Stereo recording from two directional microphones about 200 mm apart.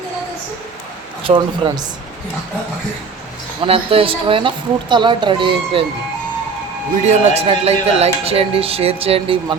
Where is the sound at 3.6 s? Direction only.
25° right (ahead or behind).